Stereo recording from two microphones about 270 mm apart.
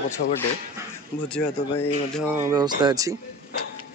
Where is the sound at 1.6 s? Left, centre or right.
Centre.